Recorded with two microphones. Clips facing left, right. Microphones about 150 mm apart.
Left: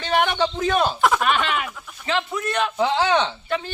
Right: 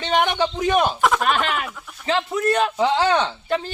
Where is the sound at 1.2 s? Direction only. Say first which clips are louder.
Even; 40° right (ahead or behind).